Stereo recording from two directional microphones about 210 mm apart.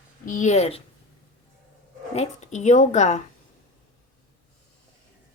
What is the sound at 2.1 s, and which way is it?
A woman's voice, 35° left (ahead or behind).